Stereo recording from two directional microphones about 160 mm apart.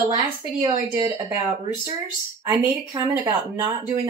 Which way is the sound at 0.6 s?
20° right (ahead or behind).